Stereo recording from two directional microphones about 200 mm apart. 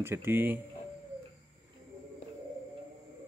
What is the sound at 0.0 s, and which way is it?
Speech, 10° right (ahead or behind).